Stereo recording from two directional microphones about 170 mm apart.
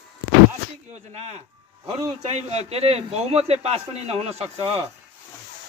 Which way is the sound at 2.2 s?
40° right (ahead or behind).